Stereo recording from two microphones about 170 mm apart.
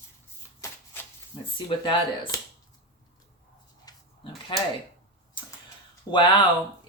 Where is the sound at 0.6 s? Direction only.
20° left (ahead or behind).